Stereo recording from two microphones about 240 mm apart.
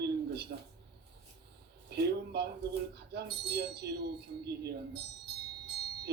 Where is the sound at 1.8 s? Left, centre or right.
Right.